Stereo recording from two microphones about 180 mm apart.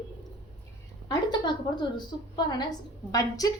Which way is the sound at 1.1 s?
25° left (ahead or behind).